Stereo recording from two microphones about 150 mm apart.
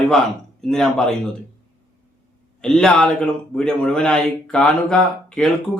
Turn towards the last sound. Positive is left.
turn(degrees=5)  # may be behind; listen again after turning